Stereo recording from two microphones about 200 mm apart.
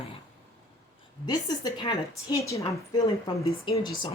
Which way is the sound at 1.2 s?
20° left (ahead or behind).